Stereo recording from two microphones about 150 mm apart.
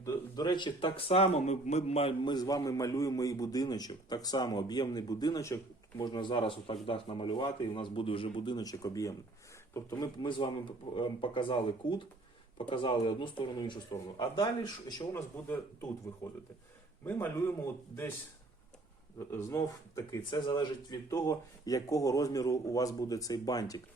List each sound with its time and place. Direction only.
0.0 s speech: 25° left (ahead or behind); by 2.3 s 40° left (ahead or behind)
2.3 s speech: 25° left (ahead or behind)
15.1 s speech: 15° left (ahead or behind)
19.3 s speech: 20° left (ahead or behind)